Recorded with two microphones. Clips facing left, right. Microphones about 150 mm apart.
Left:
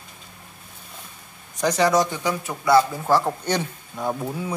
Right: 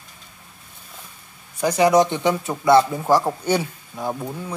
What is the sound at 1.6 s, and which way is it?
Speech, 10° right (ahead or behind).